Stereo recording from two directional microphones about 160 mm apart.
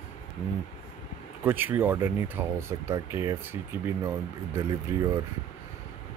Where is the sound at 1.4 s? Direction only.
10° right (ahead or behind).